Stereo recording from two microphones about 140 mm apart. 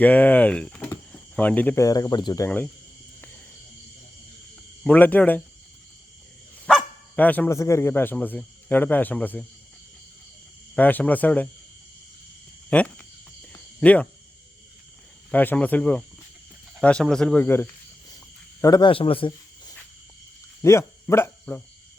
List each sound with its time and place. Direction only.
0.0 s speech: 10° left (ahead or behind)
1.8 s speech: 25° left (ahead or behind)
4.8 s speech: 10° left (ahead or behind)
7.2 s speech: 10° left (ahead or behind)
10.8 s speech: 10° left (ahead or behind)
12.7 s a sound: 10° left (ahead or behind)
13.7 s speech: 10° left (ahead or behind)
15.3 s speech: 10° left (ahead or behind)
18.6 s speech: 30° left (ahead or behind)
20.6 s speech: 20° left (ahead or behind)